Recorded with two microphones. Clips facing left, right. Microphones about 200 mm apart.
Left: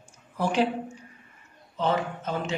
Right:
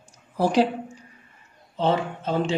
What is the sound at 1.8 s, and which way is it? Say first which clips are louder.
Speech: right 3 dB; 30° right (ahead or behind).